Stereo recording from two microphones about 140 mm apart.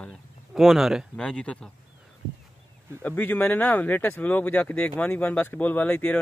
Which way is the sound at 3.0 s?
10° left (ahead or behind).